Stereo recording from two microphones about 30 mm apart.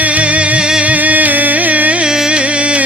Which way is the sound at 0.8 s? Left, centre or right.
Right.